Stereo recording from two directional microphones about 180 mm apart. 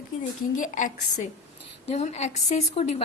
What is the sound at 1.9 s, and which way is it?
A woman's voice, 35° left (ahead or behind).